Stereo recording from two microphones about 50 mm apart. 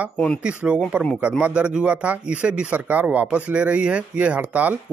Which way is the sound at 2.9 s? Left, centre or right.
Right.